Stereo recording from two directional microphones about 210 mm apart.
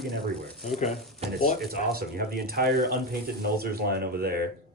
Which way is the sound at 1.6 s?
45° right (ahead or behind).